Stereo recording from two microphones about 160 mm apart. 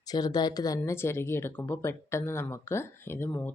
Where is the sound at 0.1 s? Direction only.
25° left (ahead or behind).